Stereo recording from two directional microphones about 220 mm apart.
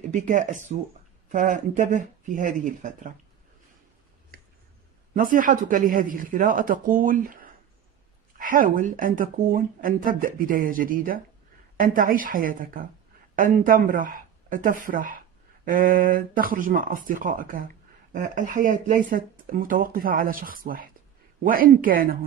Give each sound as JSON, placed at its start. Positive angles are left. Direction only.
{"t": 0.1, "sound": "speech", "side_deg": -35}
{"t": 5.1, "sound": "speech", "side_deg": -40}